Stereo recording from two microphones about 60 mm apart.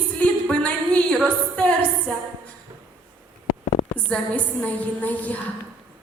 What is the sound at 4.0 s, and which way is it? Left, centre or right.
A woman's voice, left.